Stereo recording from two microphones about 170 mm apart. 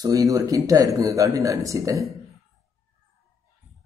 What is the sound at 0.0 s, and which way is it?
Speech, 20° right (ahead or behind).